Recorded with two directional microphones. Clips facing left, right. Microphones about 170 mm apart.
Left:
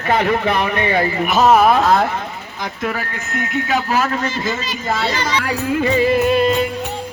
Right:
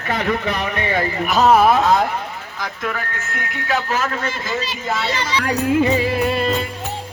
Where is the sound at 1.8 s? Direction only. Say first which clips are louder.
Left 1 dB; centre (ahead or behind).